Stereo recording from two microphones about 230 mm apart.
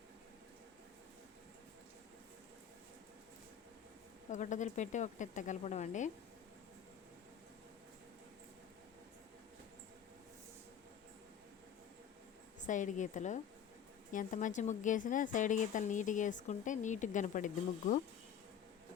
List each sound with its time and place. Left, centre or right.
4.3 s speech: left
12.6 s speech: left